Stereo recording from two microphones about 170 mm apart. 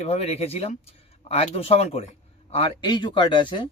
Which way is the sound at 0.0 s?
35° left (ahead or behind).